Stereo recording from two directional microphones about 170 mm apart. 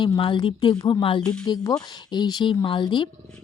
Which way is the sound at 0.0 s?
25° left (ahead or behind).